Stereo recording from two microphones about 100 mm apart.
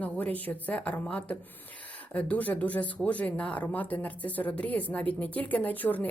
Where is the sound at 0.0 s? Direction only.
15° left (ahead or behind).